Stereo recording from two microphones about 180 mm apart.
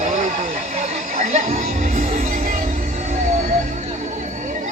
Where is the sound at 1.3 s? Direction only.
45° right (ahead or behind).